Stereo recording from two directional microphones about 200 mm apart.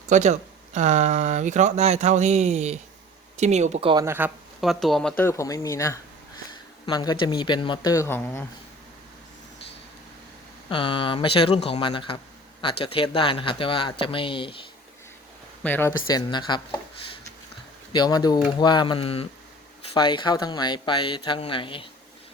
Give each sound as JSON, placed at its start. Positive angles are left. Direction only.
{"t": 0.1, "sound": "speech", "side_deg": -35}
{"t": 4.0, "sound": "speech", "side_deg": -10}
{"t": 4.6, "sound": "speech", "side_deg": 0}
{"t": 10.7, "sound": "speech", "side_deg": 25}
{"t": 15.6, "sound": "speech", "side_deg": 10}
{"t": 17.9, "sound": "speech", "side_deg": 20}